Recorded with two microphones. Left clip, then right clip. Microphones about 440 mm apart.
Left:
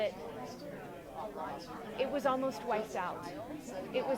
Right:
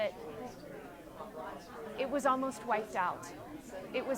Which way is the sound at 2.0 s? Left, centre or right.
Centre.